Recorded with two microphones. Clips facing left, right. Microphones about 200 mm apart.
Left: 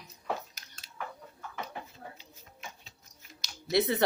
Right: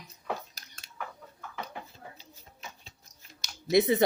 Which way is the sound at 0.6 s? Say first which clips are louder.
Right 1 dB; 35° right (ahead or behind).